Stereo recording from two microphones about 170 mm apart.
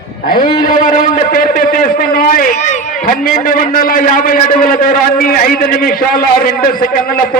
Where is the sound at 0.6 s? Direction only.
55° left (ahead or behind).